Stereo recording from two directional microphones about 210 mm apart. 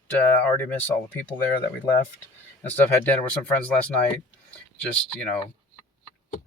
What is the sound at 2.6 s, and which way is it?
Speech, 10° left (ahead or behind).